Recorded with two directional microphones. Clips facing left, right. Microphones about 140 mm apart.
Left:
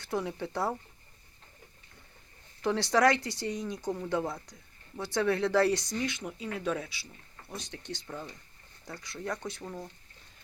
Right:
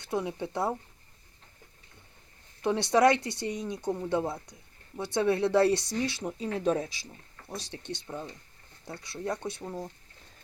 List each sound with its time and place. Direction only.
0.0 s speech: 20° right (ahead or behind)
2.6 s speech: 20° right (ahead or behind); by 7.2 s 40° right (ahead or behind)
7.5 s speech: 30° right (ahead or behind)